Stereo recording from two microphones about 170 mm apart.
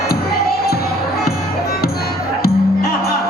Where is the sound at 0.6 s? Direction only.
65° left (ahead or behind).